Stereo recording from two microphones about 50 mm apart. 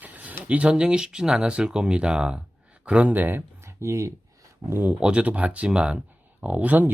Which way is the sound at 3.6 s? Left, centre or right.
Right.